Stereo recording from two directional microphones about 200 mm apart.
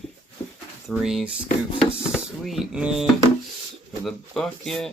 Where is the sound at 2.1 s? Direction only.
Centre (ahead or behind).